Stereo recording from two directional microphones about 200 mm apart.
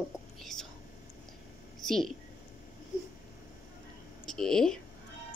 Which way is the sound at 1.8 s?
Centre (ahead or behind).